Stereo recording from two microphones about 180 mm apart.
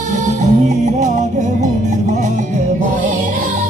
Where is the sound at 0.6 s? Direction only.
40° right (ahead or behind).